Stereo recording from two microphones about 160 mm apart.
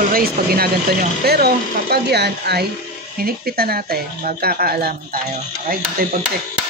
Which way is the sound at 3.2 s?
70° right (ahead or behind).